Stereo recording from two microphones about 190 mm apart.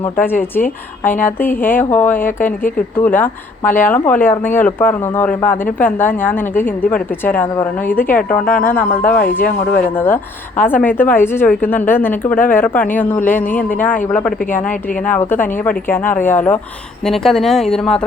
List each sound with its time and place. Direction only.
0.0 s speech: 10° left (ahead or behind)
2.4 s speech: 45° left (ahead or behind)
2.7 s speech: 10° left (ahead or behind)